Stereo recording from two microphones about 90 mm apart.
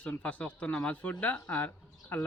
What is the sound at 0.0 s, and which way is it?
Speech, 15° left (ahead or behind).